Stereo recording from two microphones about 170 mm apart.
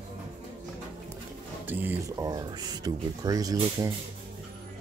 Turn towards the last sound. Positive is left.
turn(degrees=-20)  # may be behind; listen again after turning